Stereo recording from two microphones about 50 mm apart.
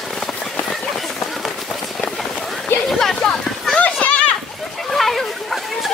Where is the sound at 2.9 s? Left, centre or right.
Centre.